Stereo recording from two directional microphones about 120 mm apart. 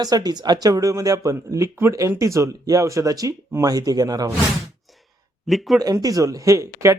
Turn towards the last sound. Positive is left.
turn(degrees=-25)  # may be behind; listen again after turning